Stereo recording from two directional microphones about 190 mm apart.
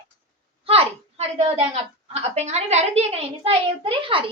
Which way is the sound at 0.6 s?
30° right (ahead or behind).